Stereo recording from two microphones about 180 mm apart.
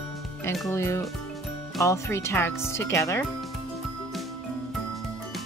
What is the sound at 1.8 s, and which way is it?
A woman's voice, 15° left (ahead or behind).